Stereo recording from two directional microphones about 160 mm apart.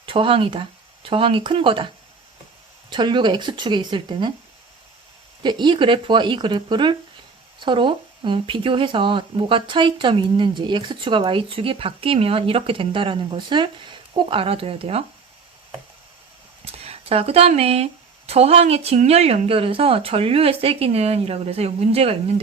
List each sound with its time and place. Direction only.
0.0 s speech: 35° right (ahead or behind)
2.9 s speech: 30° right (ahead or behind)
5.4 s speech: 30° right (ahead or behind)
16.6 s speech: 40° right (ahead or behind)